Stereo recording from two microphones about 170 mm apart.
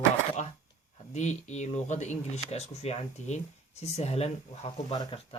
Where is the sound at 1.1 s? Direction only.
45° left (ahead or behind).